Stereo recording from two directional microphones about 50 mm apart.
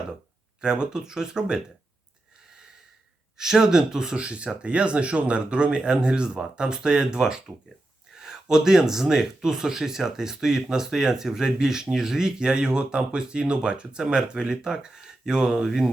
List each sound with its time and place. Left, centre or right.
0.6 s speech: centre
3.3 s speech: centre